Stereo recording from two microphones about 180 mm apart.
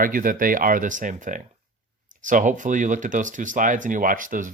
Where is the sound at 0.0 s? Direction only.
50° right (ahead or behind).